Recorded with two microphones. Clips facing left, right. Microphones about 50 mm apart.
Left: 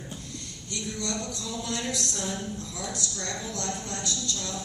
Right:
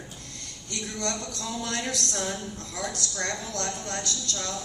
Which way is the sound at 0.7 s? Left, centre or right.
Right.